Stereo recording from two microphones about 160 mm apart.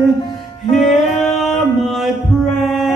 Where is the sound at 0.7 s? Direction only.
Centre (ahead or behind).